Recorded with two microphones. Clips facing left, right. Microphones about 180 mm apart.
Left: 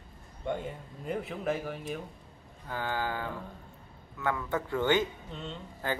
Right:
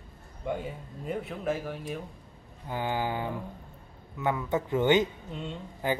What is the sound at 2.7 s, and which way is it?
Speech, 15° right (ahead or behind).